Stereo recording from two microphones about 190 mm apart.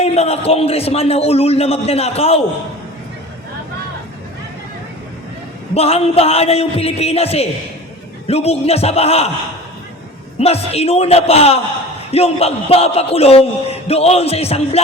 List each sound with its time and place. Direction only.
0.0 s speech: 35° left (ahead or behind)
5.7 s speech: 30° left (ahead or behind)
10.4 s speech: 35° left (ahead or behind)